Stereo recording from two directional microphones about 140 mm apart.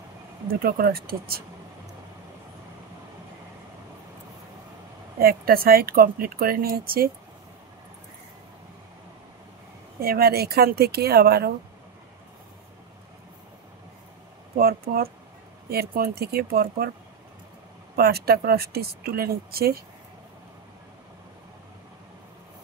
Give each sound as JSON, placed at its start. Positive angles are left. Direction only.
{"t": 0.5, "sound": "speech", "side_deg": -90}
{"t": 5.2, "sound": "speech", "side_deg": -90}
{"t": 9.9, "sound": "speech", "side_deg": -90}
{"t": 14.6, "sound": "speech", "side_deg": -90}
{"t": 17.9, "sound": "speech", "side_deg": -90}